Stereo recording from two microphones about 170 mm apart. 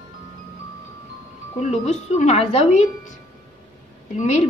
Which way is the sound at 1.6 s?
40° left (ahead or behind).